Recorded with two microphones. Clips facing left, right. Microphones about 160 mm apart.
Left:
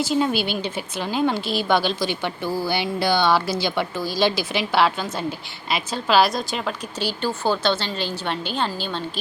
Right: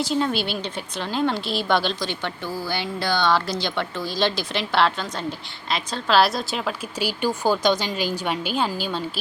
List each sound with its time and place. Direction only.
0.0 s a woman's voice: 5° left (ahead or behind)